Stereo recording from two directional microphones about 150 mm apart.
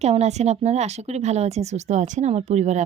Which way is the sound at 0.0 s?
50° right (ahead or behind).